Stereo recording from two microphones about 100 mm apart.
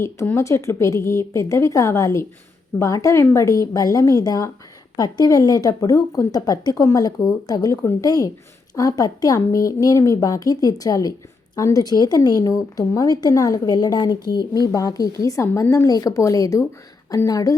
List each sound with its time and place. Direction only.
0.3 s a woman's voice: 30° left (ahead or behind)